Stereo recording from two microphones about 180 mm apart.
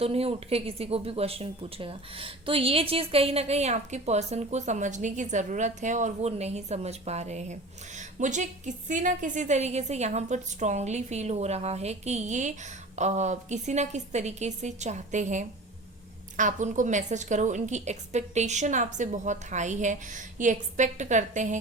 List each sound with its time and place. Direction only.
0.0 s a woman's voice: 35° right (ahead or behind)